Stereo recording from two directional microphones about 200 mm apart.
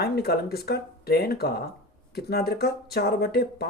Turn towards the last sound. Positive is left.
turn(degrees=55)  # may be behind; listen again after turning